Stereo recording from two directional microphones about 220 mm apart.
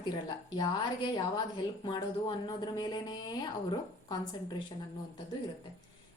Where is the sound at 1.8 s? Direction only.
20° left (ahead or behind).